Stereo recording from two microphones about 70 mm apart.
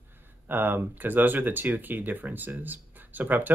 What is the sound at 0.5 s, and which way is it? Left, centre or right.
Speech, right.